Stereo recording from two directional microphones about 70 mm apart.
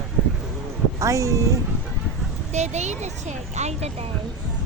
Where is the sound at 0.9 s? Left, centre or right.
Right.